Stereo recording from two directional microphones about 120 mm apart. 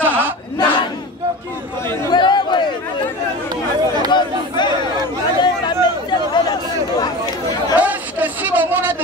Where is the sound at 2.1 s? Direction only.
40° left (ahead or behind).